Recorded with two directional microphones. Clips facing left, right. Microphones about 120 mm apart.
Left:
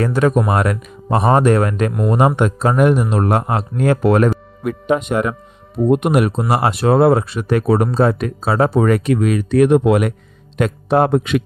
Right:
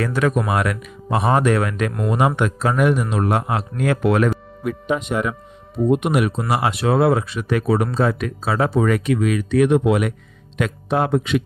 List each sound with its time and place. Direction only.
0.0 s speech: 35° left (ahead or behind)
4.7 s a man's voice: 50° left (ahead or behind)